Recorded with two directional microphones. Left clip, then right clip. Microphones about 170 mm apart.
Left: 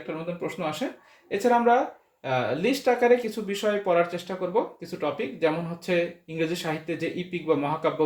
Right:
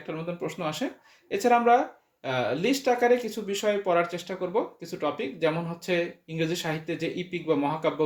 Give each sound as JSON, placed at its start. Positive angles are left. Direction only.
{"t": 0.1, "sound": "speech", "side_deg": -40}